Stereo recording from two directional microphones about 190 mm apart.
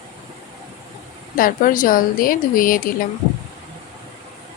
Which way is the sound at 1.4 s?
45° left (ahead or behind).